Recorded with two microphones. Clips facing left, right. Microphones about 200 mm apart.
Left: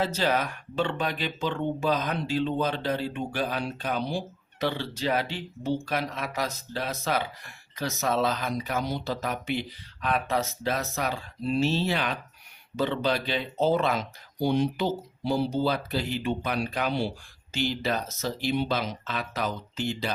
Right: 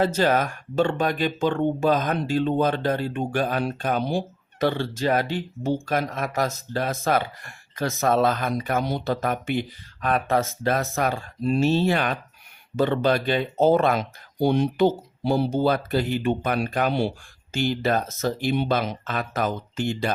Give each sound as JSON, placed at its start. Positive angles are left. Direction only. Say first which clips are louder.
{"t": 0.0, "sound": "speech", "louder": "right 5 dB", "side_deg": -50}